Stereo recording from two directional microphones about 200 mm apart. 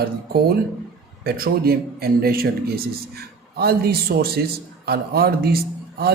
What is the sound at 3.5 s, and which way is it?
A man's voice, 50° right (ahead or behind).